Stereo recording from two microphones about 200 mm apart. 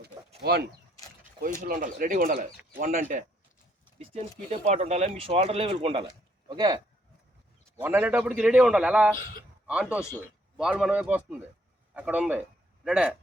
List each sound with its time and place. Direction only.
0.4 s speech: 55° right (ahead or behind); by 6.8 s 20° right (ahead or behind)
7.8 s a man's voice: 10° right (ahead or behind)
10.2 s speech: 5° right (ahead or behind)